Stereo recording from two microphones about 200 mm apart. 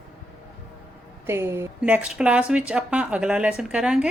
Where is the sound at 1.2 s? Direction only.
10° right (ahead or behind).